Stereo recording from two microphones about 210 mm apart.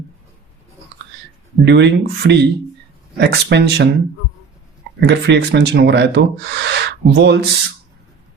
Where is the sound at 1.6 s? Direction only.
55° right (ahead or behind).